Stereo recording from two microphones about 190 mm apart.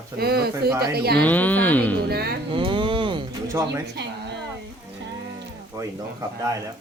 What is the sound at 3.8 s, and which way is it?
Speech, 60° right (ahead or behind).